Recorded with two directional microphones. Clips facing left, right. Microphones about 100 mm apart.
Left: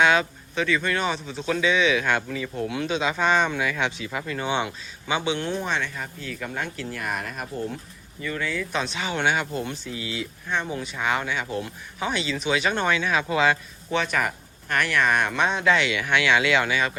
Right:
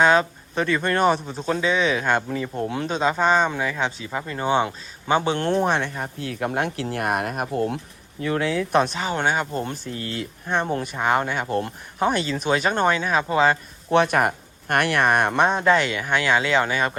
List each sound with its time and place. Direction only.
0.0 s speech: 40° right (ahead or behind)
13.9 s speech: 50° right (ahead or behind)